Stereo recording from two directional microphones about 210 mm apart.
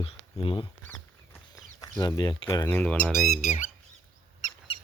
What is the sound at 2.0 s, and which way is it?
Speech, 20° left (ahead or behind).